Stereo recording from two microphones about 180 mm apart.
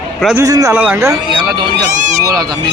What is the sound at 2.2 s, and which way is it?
Speech, 20° right (ahead or behind).